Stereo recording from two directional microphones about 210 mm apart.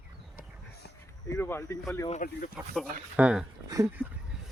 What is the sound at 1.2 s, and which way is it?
Speech, 10° left (ahead or behind).